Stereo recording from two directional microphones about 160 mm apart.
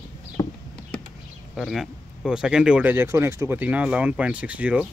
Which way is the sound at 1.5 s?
Centre (ahead or behind).